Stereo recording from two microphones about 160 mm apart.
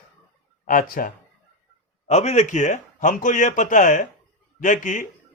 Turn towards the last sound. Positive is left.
turn(degrees=50)  # may be behind; listen again after turning